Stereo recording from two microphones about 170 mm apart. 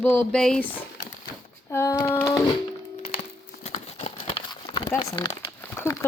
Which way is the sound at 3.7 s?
45° left (ahead or behind).